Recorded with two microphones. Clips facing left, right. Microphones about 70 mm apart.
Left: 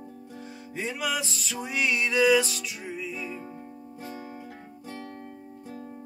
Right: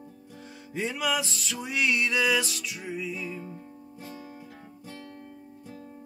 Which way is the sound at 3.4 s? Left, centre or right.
Left.